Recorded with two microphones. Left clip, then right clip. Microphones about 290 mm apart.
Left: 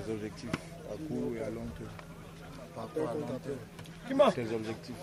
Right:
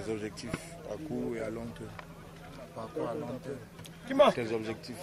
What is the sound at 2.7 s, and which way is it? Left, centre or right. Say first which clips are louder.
Speech: left 1 dB; centre.